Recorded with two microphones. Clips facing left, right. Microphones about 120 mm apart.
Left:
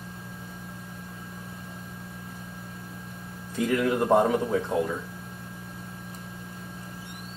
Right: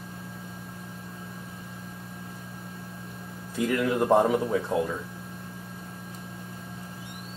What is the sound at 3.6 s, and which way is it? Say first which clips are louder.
Speech: left 1 dB; centre (ahead or behind).